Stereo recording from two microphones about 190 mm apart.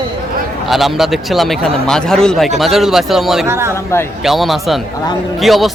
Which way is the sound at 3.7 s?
15° left (ahead or behind).